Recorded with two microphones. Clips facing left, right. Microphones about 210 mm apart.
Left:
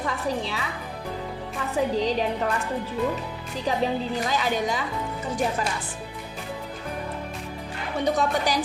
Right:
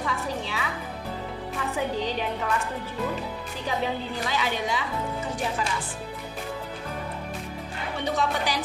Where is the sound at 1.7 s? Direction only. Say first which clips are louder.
Left 6 dB; 35° left (ahead or behind).